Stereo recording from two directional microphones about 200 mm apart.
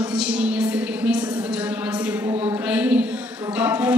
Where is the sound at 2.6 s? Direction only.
5° right (ahead or behind).